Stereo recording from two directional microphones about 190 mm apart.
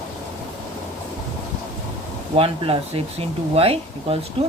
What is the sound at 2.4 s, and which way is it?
Speech, 30° right (ahead or behind).